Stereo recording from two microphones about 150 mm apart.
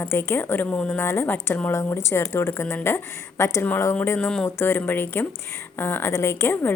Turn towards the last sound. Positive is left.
turn(degrees=15)  # may be behind; listen again after turning